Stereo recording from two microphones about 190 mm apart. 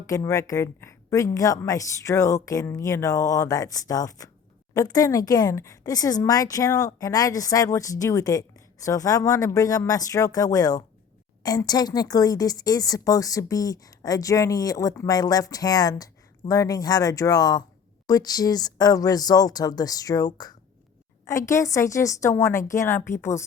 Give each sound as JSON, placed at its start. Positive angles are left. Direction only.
{"t": 0.1, "sound": "a woman's voice", "side_deg": 15}